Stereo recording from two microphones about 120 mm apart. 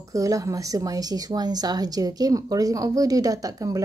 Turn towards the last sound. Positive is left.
turn(degrees=-30)  # may be behind; listen again after turning